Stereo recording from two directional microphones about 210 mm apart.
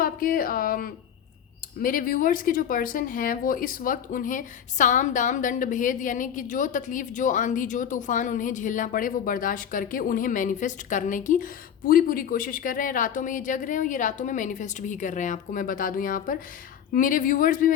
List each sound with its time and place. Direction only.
0.0 s speech: 45° left (ahead or behind)